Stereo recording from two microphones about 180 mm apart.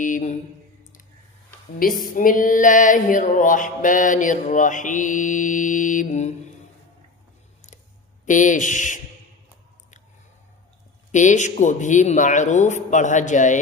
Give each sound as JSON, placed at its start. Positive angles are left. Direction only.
{"t": 0.0, "sound": "speech", "side_deg": 45}
{"t": 1.8, "sound": "mantra", "side_deg": 50}
{"t": 8.2, "sound": "mantra", "side_deg": 45}
{"t": 11.1, "sound": "mantra", "side_deg": 45}